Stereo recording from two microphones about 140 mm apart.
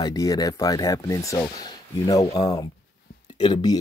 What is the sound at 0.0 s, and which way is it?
Speech, 25° left (ahead or behind).